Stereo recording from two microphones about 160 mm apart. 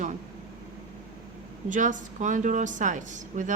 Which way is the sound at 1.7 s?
55° right (ahead or behind).